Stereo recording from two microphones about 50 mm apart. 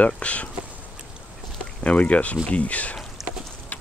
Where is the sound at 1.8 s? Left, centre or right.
Left.